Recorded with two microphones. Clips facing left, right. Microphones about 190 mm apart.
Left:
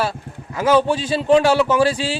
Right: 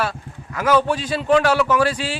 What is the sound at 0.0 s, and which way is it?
A man's voice, 30° left (ahead or behind).